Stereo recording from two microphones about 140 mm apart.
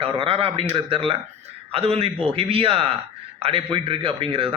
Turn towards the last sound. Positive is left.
turn(degrees=-40)  # may be behind; listen again after turning